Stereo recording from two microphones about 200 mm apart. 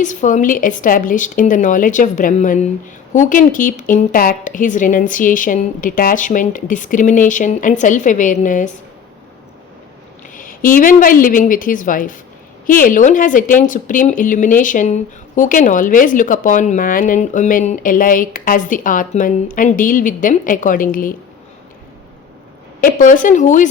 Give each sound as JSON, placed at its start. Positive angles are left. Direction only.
{"t": 0.0, "sound": "a woman's voice", "side_deg": 40}
{"t": 10.3, "sound": "a woman's voice", "side_deg": 45}
{"t": 22.8, "sound": "a woman's voice", "side_deg": 40}